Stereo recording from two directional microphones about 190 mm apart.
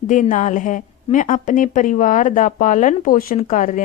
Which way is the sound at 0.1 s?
40° left (ahead or behind).